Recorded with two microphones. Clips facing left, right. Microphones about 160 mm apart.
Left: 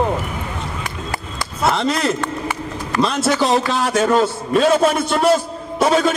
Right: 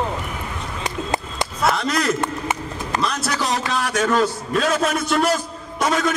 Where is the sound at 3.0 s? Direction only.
25° left (ahead or behind).